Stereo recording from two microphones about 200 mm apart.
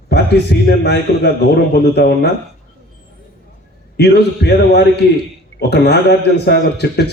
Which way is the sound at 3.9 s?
55° left (ahead or behind).